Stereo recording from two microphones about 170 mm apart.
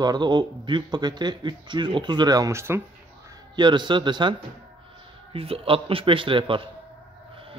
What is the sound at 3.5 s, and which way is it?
Speech, 25° right (ahead or behind).